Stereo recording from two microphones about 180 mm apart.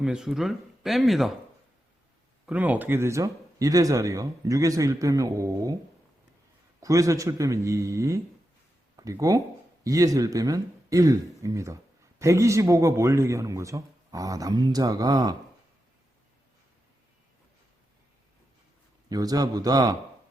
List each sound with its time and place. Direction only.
0.0 s speech: 5° right (ahead or behind)
2.5 s speech: 10° right (ahead or behind)
6.7 s a man's voice: 20° right (ahead or behind)
19.0 s speech: 20° right (ahead or behind)